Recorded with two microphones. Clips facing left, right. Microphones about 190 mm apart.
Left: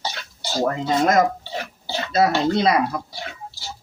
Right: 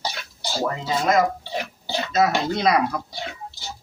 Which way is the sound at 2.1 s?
30° left (ahead or behind).